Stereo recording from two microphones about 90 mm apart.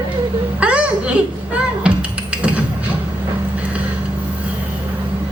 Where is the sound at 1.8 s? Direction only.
15° right (ahead or behind).